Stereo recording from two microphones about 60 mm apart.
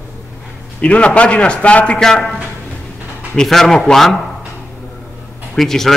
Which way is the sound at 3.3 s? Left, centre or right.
Centre.